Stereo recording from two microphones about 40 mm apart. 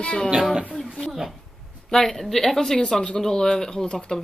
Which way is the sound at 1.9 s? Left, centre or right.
Centre.